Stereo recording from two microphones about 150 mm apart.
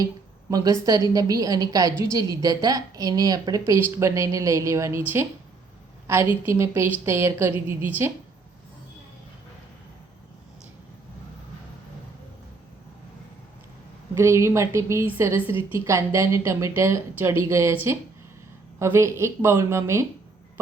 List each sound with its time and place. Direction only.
0.5 s a woman's voice: 25° right (ahead or behind)
6.4 s a woman's voice: 15° right (ahead or behind)
14.2 s a woman's voice: 20° right (ahead or behind)
18.8 s a woman's voice: 20° right (ahead or behind)